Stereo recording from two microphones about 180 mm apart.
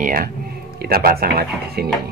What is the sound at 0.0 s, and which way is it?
A man's voice, 50° right (ahead or behind).